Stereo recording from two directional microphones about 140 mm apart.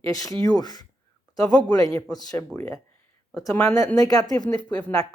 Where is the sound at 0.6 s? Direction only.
30° left (ahead or behind).